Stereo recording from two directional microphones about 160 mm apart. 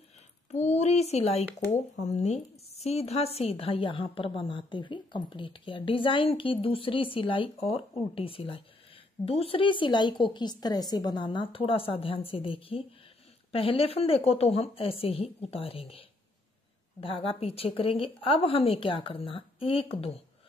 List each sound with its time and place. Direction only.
0.5 s speech: 45° left (ahead or behind)